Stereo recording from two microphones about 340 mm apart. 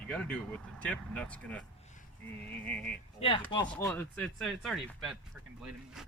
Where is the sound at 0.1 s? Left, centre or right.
Centre.